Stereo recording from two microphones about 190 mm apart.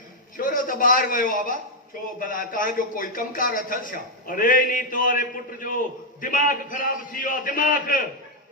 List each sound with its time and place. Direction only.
0.3 s speech: 45° left (ahead or behind)